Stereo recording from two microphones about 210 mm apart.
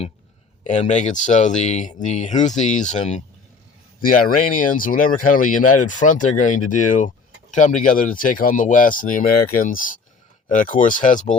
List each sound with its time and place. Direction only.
0.6 s speech: 35° left (ahead or behind)